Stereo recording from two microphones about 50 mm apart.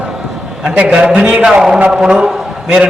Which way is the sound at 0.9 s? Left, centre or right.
Right.